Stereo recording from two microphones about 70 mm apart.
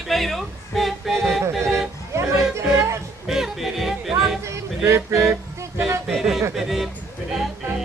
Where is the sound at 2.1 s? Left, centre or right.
Right.